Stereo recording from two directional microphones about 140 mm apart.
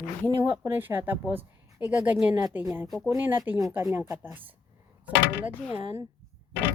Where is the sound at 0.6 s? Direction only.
15° right (ahead or behind).